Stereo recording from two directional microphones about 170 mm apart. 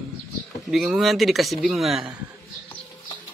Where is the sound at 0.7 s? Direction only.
Centre (ahead or behind).